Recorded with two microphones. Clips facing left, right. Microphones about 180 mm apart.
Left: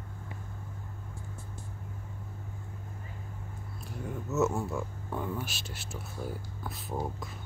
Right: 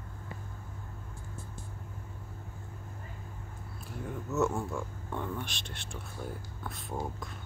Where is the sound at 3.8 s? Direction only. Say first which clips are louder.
Left 1 dB; centre (ahead or behind).